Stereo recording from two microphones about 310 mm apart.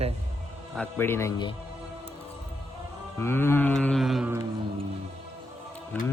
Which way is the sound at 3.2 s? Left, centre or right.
Centre.